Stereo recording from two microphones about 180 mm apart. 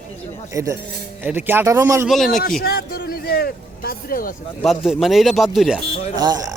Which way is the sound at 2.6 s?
55° left (ahead or behind).